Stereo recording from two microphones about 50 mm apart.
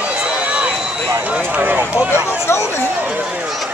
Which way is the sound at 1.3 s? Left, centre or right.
Right.